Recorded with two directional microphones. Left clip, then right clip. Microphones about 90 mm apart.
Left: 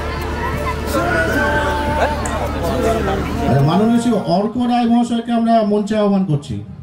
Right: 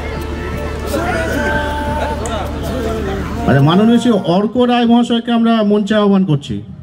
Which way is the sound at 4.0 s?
25° right (ahead or behind).